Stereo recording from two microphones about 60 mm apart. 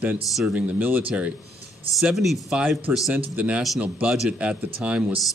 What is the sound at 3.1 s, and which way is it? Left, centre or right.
Speech, right.